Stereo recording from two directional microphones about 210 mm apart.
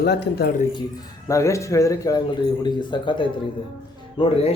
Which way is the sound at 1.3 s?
15° left (ahead or behind).